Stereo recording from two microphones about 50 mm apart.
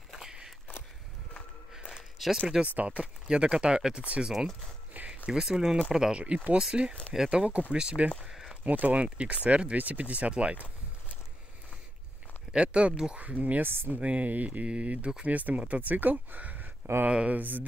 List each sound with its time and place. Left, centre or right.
0.1 s walk: centre
2.1 s speech: centre
2.6 s speech: right
3.0 s speech: centre
4.9 s a sound: right
5.9 s speech: centre
8.6 s speech: right
12.5 s speech: right
13.2 s speech: right
13.9 s speech: right
15.2 s speech: right
17.1 s speech: right
17.4 s speech: right